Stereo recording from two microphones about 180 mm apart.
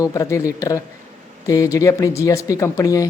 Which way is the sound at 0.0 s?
20° left (ahead or behind).